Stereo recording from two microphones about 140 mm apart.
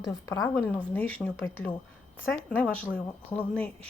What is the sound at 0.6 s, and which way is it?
Speech, 15° left (ahead or behind).